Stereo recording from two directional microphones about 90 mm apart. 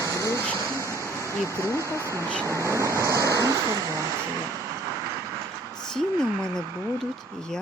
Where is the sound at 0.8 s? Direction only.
35° right (ahead or behind).